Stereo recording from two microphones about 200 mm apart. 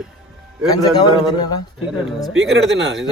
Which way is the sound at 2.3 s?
Centre (ahead or behind).